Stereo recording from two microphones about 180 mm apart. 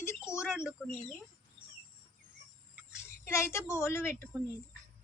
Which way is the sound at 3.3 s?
15° left (ahead or behind).